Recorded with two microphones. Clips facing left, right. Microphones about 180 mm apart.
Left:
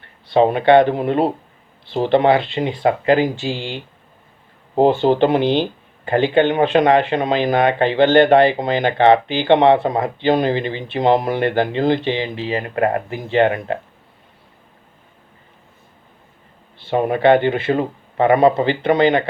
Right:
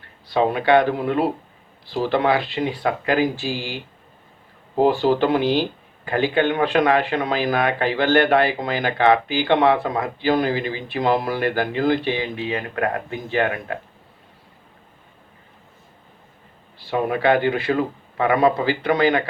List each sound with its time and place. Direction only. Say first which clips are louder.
0.3 s speech: left 5 dB; 25° left (ahead or behind)
16.7 s speech: left 4 dB; 25° left (ahead or behind)